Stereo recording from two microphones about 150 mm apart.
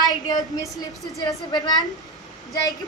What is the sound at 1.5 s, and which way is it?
Speech, 25° left (ahead or behind).